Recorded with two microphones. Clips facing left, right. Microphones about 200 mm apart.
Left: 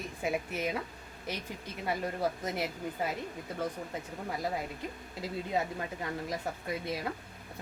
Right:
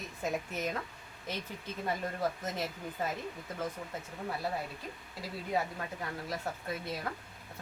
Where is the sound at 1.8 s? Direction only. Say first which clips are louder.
Left 2 dB; 10° left (ahead or behind).